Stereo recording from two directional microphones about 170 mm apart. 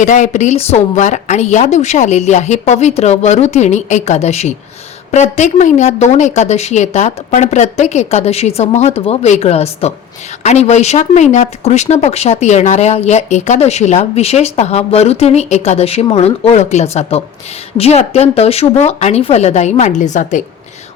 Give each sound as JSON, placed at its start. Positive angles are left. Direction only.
{"t": 0.0, "sound": "a woman's voice", "side_deg": 45}